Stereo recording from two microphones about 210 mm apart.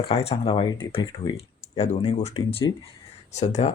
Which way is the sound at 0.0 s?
30° left (ahead or behind).